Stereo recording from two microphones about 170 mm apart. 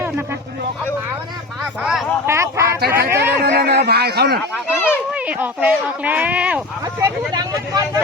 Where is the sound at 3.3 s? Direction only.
75° right (ahead or behind).